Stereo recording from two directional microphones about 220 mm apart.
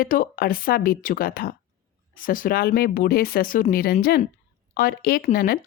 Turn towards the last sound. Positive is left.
turn(degrees=40)  # may be behind; listen again after turning